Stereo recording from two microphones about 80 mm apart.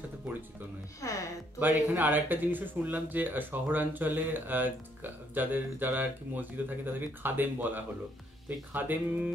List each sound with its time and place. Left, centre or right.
1.0 s speech: left
1.6 s speech: right